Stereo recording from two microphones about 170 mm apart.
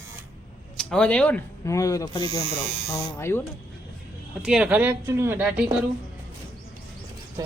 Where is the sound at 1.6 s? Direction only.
20° left (ahead or behind).